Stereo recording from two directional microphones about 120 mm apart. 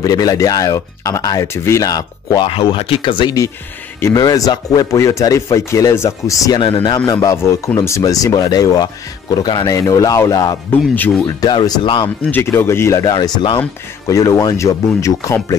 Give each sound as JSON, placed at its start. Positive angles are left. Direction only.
{"t": 0.0, "sound": "speech", "side_deg": 30}
{"t": 2.5, "sound": "speech", "side_deg": 50}
{"t": 4.0, "sound": "speech", "side_deg": 30}
{"t": 6.6, "sound": "speech", "side_deg": 40}
{"t": 7.1, "sound": "speech", "side_deg": 30}
{"t": 12.3, "sound": "speech", "side_deg": 20}